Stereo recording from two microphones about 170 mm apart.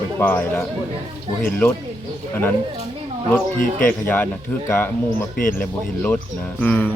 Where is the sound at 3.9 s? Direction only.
10° left (ahead or behind).